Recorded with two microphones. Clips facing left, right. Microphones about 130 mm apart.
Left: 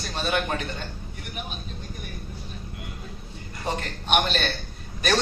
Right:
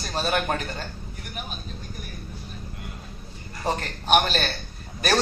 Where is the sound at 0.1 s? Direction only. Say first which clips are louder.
Right 2 dB; 40° right (ahead or behind).